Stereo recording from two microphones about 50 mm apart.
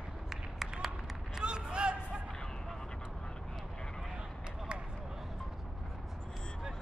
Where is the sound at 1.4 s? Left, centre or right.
Centre.